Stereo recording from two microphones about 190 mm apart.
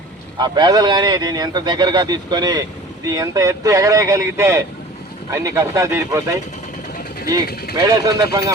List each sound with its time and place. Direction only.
0.3 s speech: 20° right (ahead or behind)
7.9 s speech: 20° right (ahead or behind)